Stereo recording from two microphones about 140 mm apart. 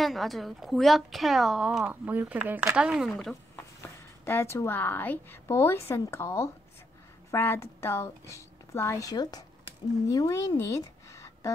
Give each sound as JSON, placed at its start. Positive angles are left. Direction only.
{"t": 0.0, "sound": "a woman's voice", "side_deg": 0}
{"t": 3.5, "sound": "a woman's voice", "side_deg": 15}